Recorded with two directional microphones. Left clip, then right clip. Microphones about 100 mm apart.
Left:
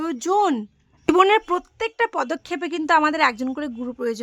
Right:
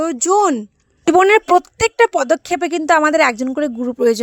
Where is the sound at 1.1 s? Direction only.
90° right.